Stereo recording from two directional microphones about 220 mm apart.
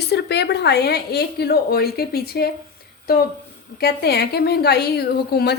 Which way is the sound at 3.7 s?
45° left (ahead or behind).